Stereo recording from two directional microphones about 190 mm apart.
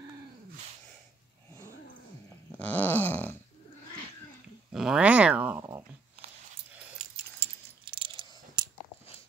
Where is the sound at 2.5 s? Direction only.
10° left (ahead or behind).